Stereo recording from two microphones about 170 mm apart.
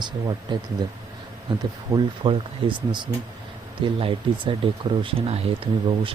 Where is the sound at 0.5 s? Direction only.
25° right (ahead or behind).